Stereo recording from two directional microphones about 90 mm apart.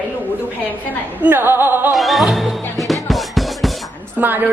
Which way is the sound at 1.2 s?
20° right (ahead or behind).